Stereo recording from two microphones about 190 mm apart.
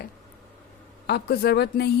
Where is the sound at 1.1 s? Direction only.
55° left (ahead or behind).